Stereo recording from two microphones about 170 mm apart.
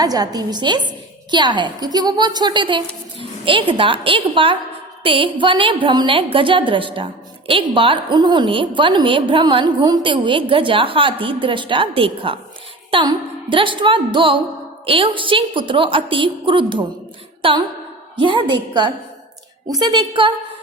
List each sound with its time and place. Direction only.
0.0 s a woman's voice: 20° right (ahead or behind)